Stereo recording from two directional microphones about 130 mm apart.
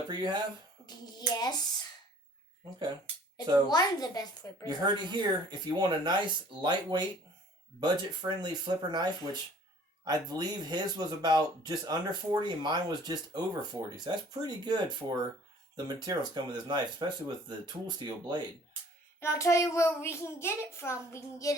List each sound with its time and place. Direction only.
0.1 s speech: 35° right (ahead or behind)
0.9 s speech: 30° left (ahead or behind)
3.7 s speech: 30° left (ahead or behind)
4.6 s speech: 35° right (ahead or behind)
19.2 s a child's voice: 20° left (ahead or behind)